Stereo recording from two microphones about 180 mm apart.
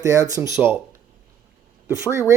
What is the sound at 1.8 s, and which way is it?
Speech, 15° right (ahead or behind).